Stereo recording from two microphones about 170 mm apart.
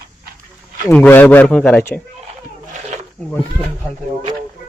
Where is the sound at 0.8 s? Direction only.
10° left (ahead or behind).